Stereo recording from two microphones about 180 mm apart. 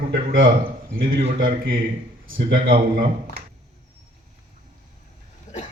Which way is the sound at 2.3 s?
55° right (ahead or behind).